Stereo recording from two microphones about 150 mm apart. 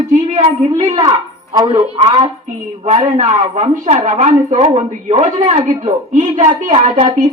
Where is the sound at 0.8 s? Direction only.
25° right (ahead or behind).